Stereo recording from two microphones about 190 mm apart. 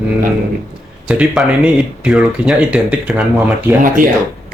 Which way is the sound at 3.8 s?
45° right (ahead or behind).